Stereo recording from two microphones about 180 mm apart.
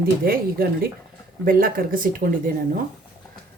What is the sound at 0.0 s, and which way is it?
Speech, 55° right (ahead or behind).